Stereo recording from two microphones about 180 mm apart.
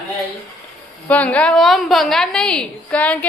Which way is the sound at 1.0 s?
10° left (ahead or behind).